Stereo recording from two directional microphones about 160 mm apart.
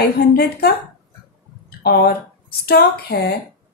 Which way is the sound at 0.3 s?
75° left (ahead or behind).